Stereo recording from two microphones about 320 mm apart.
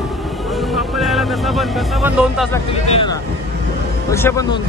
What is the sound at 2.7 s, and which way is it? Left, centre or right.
Speech, centre.